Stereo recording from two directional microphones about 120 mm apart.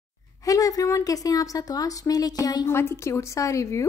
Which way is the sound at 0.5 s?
30° left (ahead or behind).